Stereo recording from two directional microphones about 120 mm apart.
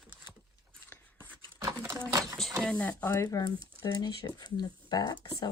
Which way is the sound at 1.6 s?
20° right (ahead or behind).